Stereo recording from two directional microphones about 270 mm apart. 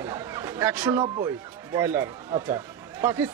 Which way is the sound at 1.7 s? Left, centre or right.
Centre.